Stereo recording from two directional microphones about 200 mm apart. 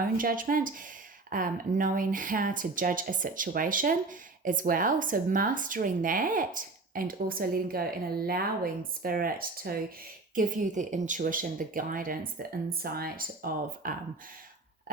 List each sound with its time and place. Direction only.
0.0 s speech: 45° right (ahead or behind)
14.9 s burping: 45° right (ahead or behind)